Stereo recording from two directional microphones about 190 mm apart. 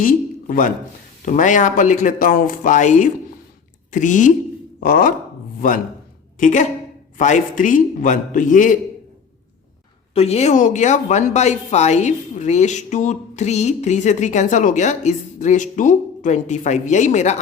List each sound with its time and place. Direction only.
0.0 s a man's voice: 45° left (ahead or behind)
6.4 s a man's voice: 40° left (ahead or behind)
10.2 s speech: 35° left (ahead or behind)